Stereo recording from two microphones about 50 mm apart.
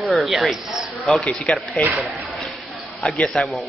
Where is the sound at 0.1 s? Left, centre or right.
Centre.